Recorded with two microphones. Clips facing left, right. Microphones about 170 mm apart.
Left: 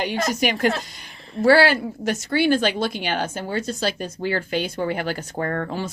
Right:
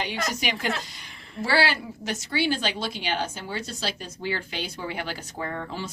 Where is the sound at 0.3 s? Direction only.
50° left (ahead or behind).